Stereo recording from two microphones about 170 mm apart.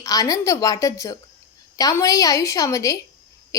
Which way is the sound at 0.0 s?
20° left (ahead or behind).